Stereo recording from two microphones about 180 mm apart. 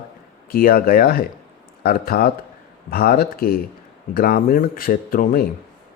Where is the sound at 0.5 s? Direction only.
55° left (ahead or behind).